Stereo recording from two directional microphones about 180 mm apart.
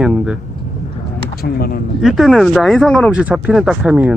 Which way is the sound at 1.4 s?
55° left (ahead or behind).